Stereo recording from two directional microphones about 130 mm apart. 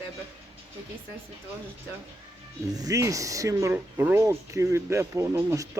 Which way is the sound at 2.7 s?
25° right (ahead or behind).